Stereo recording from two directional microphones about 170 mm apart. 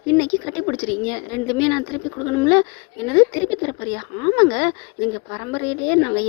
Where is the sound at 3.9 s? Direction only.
25° left (ahead or behind).